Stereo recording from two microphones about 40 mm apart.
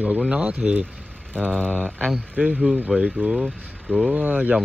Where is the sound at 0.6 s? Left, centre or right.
Centre.